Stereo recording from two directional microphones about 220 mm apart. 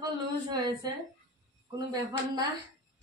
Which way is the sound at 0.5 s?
20° right (ahead or behind).